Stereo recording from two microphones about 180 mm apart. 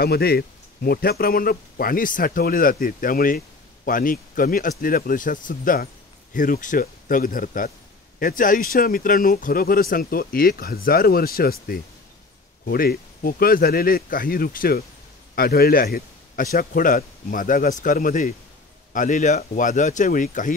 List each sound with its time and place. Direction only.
0.0 s a man's voice: 60° left (ahead or behind)